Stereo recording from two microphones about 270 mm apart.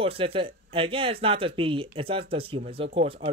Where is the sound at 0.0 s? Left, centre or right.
Right.